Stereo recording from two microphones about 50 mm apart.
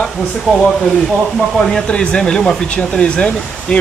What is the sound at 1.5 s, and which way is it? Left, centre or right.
Speech, centre.